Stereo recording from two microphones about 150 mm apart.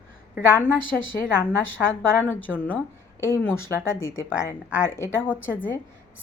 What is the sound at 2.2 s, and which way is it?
Speech, 10° left (ahead or behind).